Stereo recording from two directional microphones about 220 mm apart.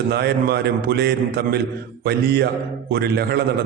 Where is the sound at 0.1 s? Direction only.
45° right (ahead or behind).